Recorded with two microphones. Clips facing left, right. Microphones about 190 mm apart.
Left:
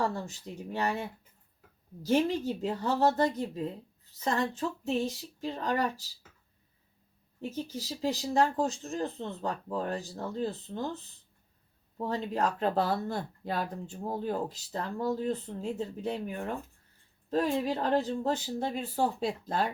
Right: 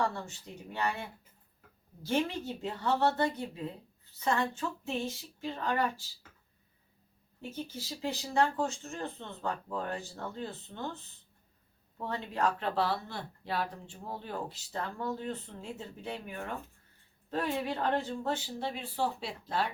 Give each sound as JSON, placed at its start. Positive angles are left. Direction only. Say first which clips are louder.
{"t": 0.0, "sound": "speech", "louder": "left 2 dB", "side_deg": 35}
{"t": 7.5, "sound": "speech", "louder": "left 2 dB", "side_deg": 35}
{"t": 11.9, "sound": "speech", "louder": "left 4 dB", "side_deg": 35}